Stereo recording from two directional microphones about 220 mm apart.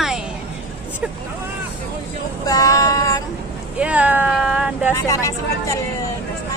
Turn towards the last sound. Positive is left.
turn(degrees=15)  # may be behind; listen again after turning